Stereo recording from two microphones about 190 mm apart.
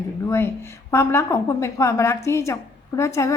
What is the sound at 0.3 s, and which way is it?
A woman's voice, 15° left (ahead or behind).